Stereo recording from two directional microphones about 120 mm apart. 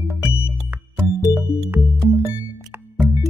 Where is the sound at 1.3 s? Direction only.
15° right (ahead or behind).